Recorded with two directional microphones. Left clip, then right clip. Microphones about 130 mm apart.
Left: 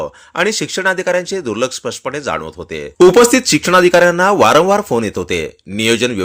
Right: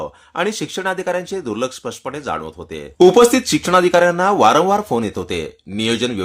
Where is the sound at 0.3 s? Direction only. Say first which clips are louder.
Left 5 dB; 20° left (ahead or behind).